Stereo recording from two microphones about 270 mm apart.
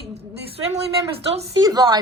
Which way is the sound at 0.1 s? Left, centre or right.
Right.